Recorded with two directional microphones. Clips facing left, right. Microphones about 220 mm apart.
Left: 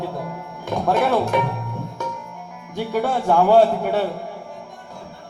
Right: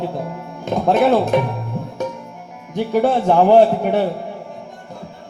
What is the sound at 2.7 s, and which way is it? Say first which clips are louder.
A man's voice: right 5 dB; 20° right (ahead or behind).